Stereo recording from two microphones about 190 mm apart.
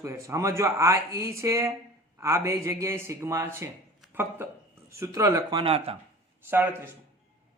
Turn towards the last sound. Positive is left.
turn(degrees=-10)  # may be behind; listen again after turning